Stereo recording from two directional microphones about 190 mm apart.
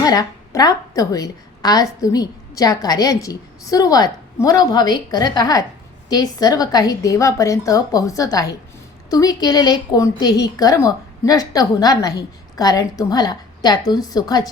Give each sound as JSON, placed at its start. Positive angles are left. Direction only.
{"t": 0.0, "sound": "a woman's voice", "side_deg": 20}